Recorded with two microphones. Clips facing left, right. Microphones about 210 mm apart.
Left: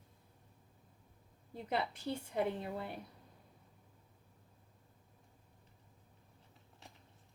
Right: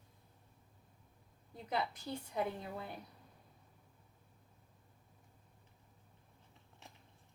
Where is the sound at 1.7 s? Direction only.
30° left (ahead or behind).